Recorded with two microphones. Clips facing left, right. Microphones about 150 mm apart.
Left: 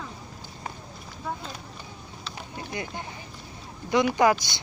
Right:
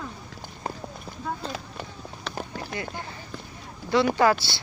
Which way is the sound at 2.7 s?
20° left (ahead or behind).